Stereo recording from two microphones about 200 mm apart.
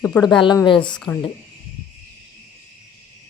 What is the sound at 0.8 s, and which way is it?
Speech, 5° left (ahead or behind).